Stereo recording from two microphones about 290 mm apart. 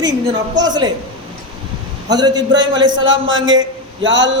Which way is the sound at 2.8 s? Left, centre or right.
Right.